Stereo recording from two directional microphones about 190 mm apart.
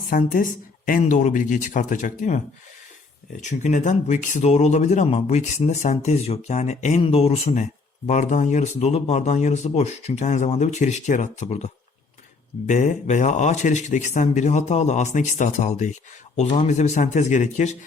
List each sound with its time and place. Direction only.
0.1 s speech: 45° left (ahead or behind)
3.6 s speech: 40° left (ahead or behind)